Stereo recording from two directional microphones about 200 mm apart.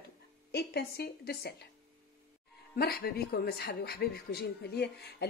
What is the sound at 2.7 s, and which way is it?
Speech, 50° left (ahead or behind).